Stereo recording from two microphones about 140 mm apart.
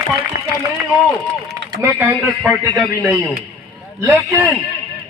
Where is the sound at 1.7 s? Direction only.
20° right (ahead or behind).